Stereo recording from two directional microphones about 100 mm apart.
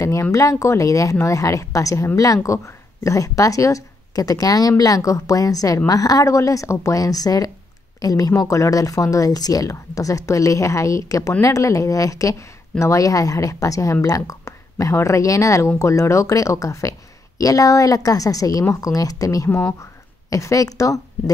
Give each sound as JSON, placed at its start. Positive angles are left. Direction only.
{"t": 0.0, "sound": "speech", "side_deg": 30}